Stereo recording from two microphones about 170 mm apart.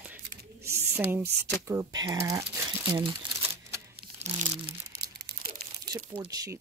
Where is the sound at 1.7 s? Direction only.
20° right (ahead or behind).